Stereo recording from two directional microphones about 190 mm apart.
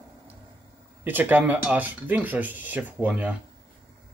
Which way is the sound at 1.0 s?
10° right (ahead or behind).